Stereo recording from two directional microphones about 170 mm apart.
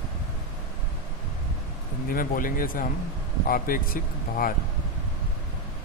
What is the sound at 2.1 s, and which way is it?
Speech, 55° left (ahead or behind).